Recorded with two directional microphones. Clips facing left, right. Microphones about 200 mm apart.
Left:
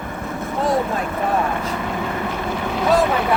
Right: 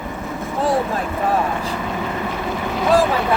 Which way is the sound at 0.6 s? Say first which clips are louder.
Right 1 dB; 5° right (ahead or behind).